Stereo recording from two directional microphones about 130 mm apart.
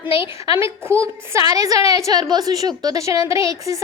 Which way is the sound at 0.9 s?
20° right (ahead or behind).